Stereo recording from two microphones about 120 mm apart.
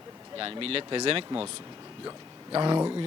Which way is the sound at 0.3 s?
50° right (ahead or behind).